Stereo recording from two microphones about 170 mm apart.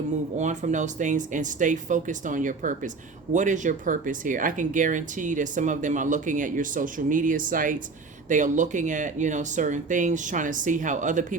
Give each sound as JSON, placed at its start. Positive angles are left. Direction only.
{"t": 0.3, "sound": "speech", "side_deg": -45}